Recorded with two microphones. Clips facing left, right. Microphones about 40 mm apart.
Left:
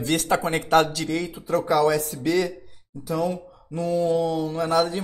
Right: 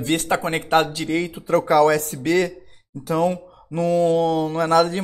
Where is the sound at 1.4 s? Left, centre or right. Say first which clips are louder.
Right 4 dB; right.